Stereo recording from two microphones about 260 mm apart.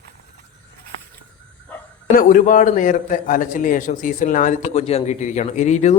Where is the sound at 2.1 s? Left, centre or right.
Left.